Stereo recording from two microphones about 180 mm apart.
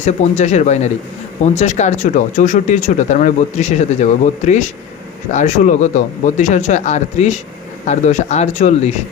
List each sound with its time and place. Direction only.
0.0 s speech: 40° left (ahead or behind)